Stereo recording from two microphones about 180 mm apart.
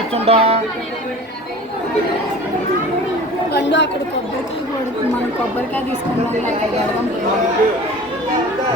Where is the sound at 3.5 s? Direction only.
70° left (ahead or behind).